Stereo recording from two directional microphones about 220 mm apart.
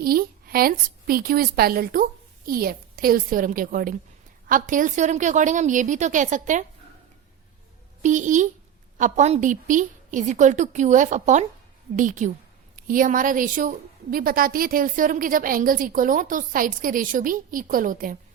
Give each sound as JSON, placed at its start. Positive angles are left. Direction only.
{"t": 0.0, "sound": "a woman's voice", "side_deg": -40}
{"t": 8.0, "sound": "a woman's voice", "side_deg": -35}